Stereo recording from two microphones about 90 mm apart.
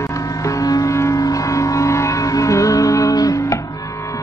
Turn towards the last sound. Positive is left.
turn(degrees=35)  # may be behind; listen again after turning